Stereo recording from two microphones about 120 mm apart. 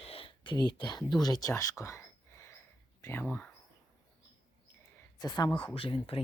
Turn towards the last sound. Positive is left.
turn(degrees=45)  # may be behind; listen again after turning